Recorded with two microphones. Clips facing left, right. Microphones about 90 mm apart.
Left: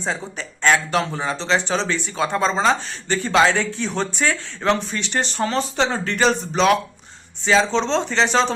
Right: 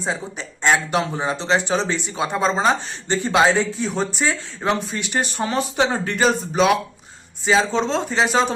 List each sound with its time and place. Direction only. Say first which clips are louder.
0.0 s speech: even; 10° right (ahead or behind)